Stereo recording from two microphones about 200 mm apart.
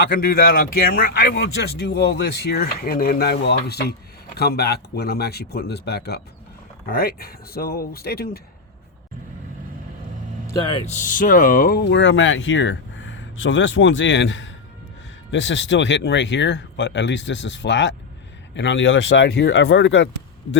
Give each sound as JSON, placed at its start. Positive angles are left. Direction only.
{"t": 0.3, "sound": "speech", "side_deg": 50}
{"t": 10.5, "sound": "speech", "side_deg": 25}